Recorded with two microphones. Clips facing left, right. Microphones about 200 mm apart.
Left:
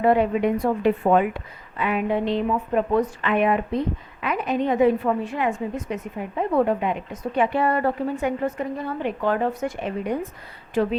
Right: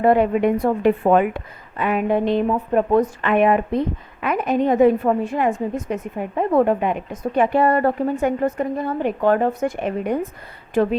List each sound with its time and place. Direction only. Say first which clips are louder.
0.0 s speech: right 3 dB; 50° right (ahead or behind)